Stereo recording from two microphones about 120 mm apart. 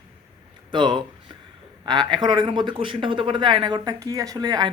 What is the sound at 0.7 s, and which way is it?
A man's voice, 40° right (ahead or behind).